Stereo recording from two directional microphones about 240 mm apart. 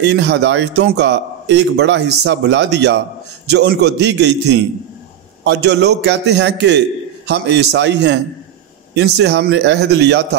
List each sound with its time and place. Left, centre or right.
0.0 s speech: right